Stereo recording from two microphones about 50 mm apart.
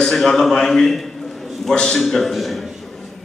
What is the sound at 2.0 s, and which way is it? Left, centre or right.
Speech, centre.